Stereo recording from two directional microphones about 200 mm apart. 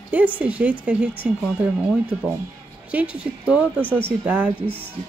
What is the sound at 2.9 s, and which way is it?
Speech, 5° right (ahead or behind).